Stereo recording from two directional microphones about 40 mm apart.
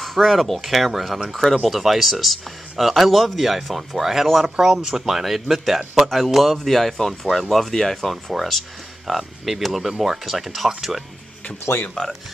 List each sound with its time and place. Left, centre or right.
0.0 s speech: centre
6.0 s speech: centre
12.0 s speech: centre